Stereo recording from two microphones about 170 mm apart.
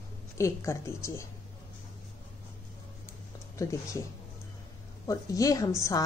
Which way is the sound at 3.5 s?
20° left (ahead or behind).